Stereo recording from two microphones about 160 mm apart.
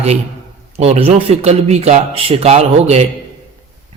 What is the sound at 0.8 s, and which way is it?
A man's voice, 40° right (ahead or behind).